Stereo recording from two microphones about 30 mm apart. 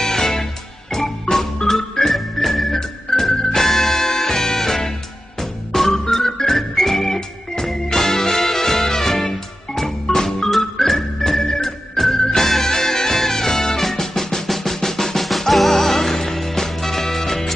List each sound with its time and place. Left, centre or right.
0.0 s music: centre
1.3 s organ: centre
2.8 s music: centre
5.4 s organ: centre
7.6 s music: centre
10.5 s organ: centre
11.4 s music: centre
13.8 s drum: centre